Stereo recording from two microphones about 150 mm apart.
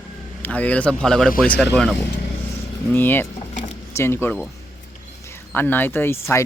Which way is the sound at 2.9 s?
15° left (ahead or behind).